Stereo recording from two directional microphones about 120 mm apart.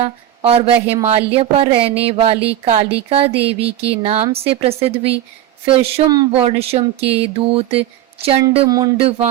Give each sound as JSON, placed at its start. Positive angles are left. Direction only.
{"t": 0.0, "sound": "speech", "side_deg": -55}
{"t": 8.6, "sound": "speech", "side_deg": -30}
{"t": 9.0, "sound": "speech", "side_deg": -55}